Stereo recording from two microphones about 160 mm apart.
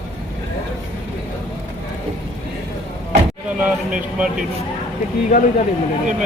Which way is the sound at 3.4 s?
10° right (ahead or behind).